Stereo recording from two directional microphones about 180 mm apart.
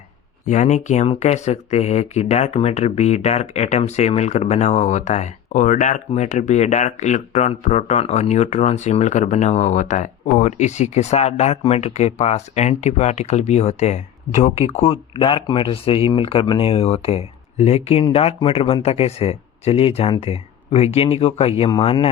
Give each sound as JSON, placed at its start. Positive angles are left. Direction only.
{"t": 0.4, "sound": "speech", "side_deg": 40}